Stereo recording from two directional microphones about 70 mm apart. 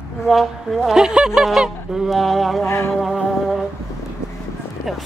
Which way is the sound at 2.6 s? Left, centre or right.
Left.